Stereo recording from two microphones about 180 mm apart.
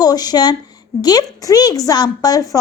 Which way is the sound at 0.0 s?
20° left (ahead or behind).